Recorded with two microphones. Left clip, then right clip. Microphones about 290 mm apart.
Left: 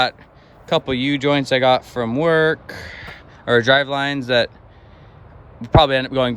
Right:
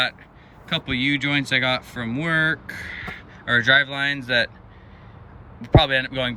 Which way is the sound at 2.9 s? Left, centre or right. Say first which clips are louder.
Right 2 dB; centre.